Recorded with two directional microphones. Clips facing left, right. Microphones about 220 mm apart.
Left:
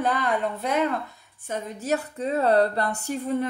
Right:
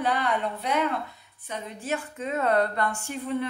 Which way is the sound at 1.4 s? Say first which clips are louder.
Left 4 dB; 45° left (ahead or behind).